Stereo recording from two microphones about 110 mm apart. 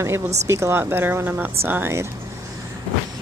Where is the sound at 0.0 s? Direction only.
25° right (ahead or behind).